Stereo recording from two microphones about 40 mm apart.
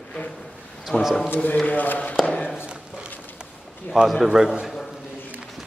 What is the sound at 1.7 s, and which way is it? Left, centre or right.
Speech, left.